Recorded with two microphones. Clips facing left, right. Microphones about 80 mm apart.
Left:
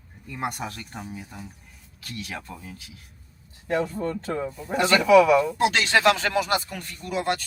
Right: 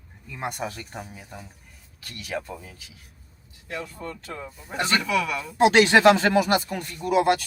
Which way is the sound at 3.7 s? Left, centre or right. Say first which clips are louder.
Left 9 dB; left.